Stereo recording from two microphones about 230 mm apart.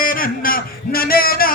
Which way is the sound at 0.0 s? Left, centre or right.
Left.